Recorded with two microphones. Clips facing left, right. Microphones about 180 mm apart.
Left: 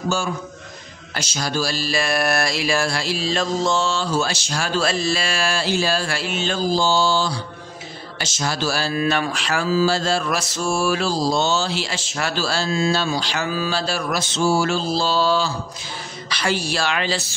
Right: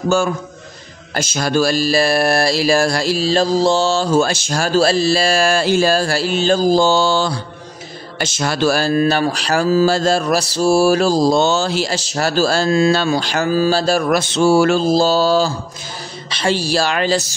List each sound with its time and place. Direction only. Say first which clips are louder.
1.1 s mantra: right 7 dB; 50° right (ahead or behind)
16.3 s mantra: right 5 dB; 25° right (ahead or behind); by 17.3 s 45° right (ahead or behind)